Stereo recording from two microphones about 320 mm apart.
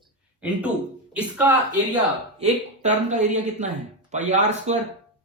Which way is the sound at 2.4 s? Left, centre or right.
Right.